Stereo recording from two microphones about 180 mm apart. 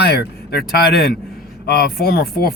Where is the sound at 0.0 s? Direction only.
60° left (ahead or behind).